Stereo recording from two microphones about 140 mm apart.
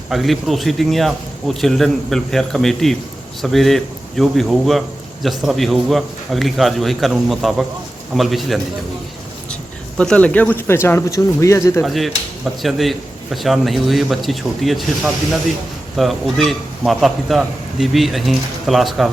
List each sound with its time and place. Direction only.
0.1 s a man's voice: centre (ahead or behind)
10.0 s speech: 10° left (ahead or behind)
11.8 s a man's voice: centre (ahead or behind)